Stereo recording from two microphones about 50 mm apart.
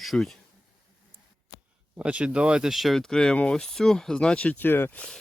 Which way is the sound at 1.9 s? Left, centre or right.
Right.